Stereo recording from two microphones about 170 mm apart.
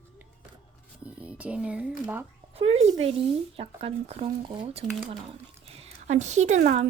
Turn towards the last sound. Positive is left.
turn(degrees=-40)  # may be behind; listen again after turning